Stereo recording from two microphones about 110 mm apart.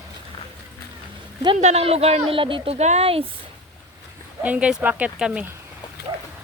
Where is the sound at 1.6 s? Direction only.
80° right; by 3.3 s 60° right (ahead or behind).